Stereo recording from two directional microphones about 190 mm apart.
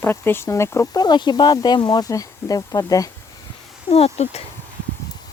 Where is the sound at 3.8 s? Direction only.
30° left (ahead or behind).